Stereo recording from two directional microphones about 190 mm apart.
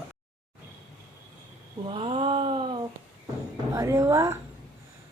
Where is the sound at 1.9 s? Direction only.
30° right (ahead or behind).